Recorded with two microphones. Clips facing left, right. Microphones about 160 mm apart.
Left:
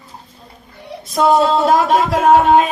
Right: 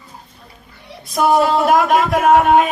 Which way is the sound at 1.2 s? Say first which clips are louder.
Left 1 dB; 25° left (ahead or behind).